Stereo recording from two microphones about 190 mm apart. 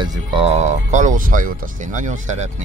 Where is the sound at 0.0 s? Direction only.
25° right (ahead or behind).